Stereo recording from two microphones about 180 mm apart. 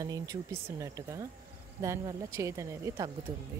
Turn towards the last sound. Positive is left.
turn(degrees=-15)  # may be behind; listen again after turning